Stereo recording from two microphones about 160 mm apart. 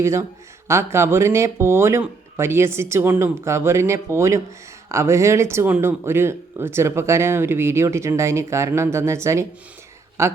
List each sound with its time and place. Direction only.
0.0 s speech: 15° right (ahead or behind)